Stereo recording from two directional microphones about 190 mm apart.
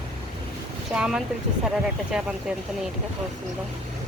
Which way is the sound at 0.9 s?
5° right (ahead or behind).